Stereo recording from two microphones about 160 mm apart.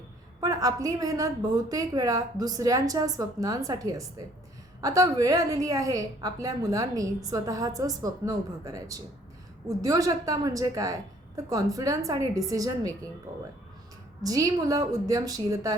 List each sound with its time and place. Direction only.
0.3 s a woman's voice: 20° right (ahead or behind)
14.2 s a woman's voice: 20° right (ahead or behind)